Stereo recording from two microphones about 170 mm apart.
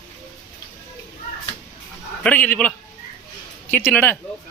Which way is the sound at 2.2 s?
10° left (ahead or behind).